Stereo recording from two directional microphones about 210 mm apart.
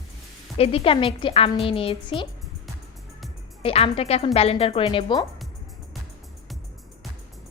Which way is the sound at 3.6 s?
25° left (ahead or behind).